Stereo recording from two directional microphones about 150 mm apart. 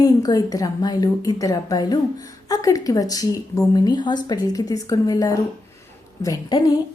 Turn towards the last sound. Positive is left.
turn(degrees=25)  # may be behind; listen again after turning